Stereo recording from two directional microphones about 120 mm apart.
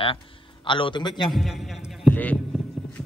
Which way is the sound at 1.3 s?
Centre (ahead or behind).